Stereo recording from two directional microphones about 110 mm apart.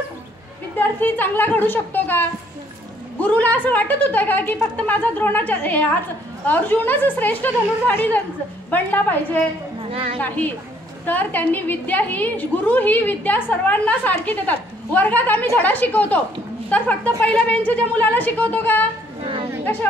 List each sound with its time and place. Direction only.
0.7 s a woman's voice: 20° left (ahead or behind)
9.8 s a sound: 55° right (ahead or behind)
10.2 s a woman's voice: 15° left (ahead or behind)